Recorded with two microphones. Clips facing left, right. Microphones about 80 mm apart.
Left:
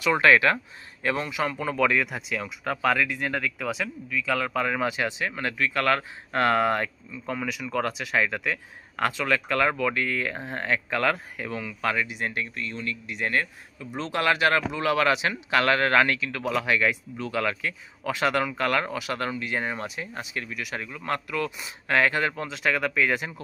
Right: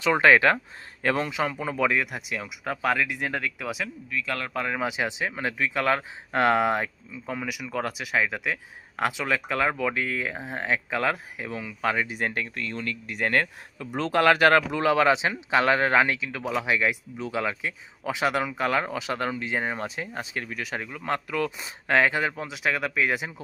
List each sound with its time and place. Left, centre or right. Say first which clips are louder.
0.0 s speech: right 1 dB; right
1.8 s speech: left 1 dB; centre
4.9 s speech: even; centre
11.8 s speech: right 1 dB; right
12.0 s speech: right 1 dB; right
14.1 s speech: right 4 dB; right; by 23.3 s centre